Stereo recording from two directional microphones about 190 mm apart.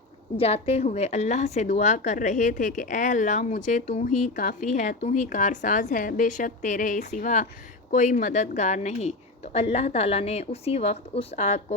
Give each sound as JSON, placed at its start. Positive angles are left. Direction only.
{"t": 0.3, "sound": "a woman's voice", "side_deg": 30}